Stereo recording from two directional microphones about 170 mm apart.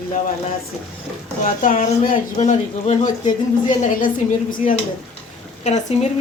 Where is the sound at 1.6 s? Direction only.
50° left (ahead or behind).